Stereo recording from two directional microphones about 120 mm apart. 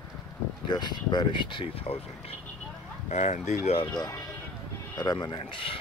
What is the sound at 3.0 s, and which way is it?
Speech, 75° left (ahead or behind).